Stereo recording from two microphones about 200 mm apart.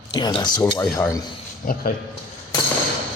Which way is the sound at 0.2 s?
25° left (ahead or behind).